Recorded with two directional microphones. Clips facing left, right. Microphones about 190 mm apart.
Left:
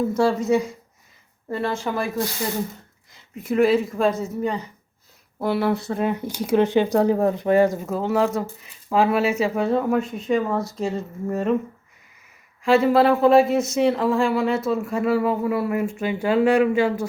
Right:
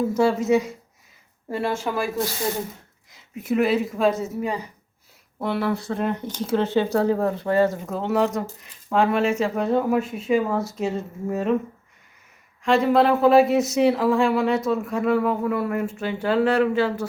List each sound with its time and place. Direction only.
0.2 s speech: 5° right (ahead or behind)
3.1 s speech: centre (ahead or behind)
5.4 s speech: 5° left (ahead or behind)
5.7 s speech: 20° left (ahead or behind)
6.0 s speech: 10° left (ahead or behind)
7.9 s speech: centre (ahead or behind)
12.6 s speech: 5° left (ahead or behind)